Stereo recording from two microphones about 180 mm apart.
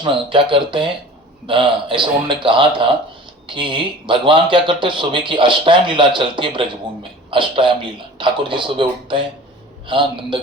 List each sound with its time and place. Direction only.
0.0 s speech: 25° right (ahead or behind)